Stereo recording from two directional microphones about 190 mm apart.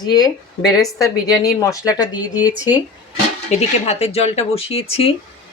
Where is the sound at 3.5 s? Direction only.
35° left (ahead or behind).